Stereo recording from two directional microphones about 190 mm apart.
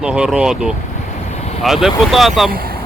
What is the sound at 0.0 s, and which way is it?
Speech, 5° right (ahead or behind).